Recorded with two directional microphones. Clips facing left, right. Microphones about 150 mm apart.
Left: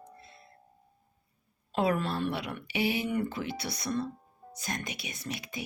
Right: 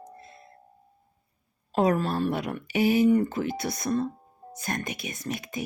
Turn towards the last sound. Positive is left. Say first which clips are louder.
# right 5 dB
turn(degrees=-45)  # may be behind; listen again after turning